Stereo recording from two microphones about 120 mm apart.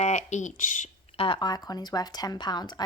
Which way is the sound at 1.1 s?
50° left (ahead or behind).